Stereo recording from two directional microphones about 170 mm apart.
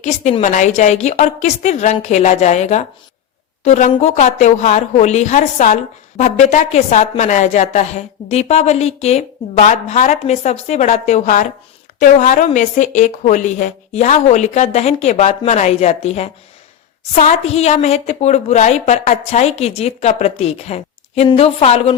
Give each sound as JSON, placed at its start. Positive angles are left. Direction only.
{"t": 0.0, "sound": "a woman's voice", "side_deg": 40}